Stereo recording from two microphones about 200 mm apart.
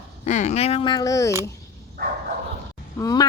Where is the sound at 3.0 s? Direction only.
15° left (ahead or behind).